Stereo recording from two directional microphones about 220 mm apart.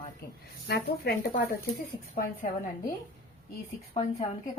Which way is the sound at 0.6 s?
50° left (ahead or behind).